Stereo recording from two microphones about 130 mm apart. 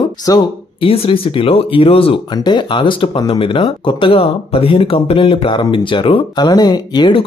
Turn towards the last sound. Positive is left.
turn(degrees=35)  # may be behind; listen again after turning